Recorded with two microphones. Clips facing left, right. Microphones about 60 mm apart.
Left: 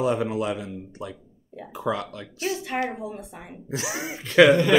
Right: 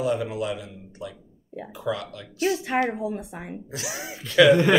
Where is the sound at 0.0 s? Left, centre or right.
Left.